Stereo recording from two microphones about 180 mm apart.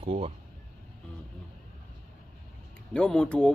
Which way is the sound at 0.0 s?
35° right (ahead or behind).